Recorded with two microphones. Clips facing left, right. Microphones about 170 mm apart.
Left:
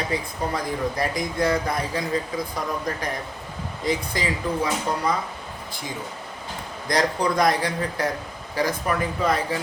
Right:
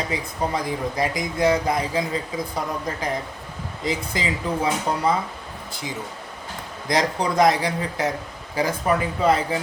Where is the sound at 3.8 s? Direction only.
25° right (ahead or behind).